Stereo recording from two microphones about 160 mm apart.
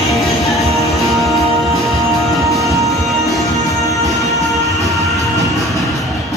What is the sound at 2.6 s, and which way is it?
Music, 20° right (ahead or behind).